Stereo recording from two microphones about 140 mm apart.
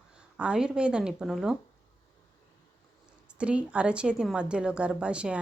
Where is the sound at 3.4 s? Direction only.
10° right (ahead or behind).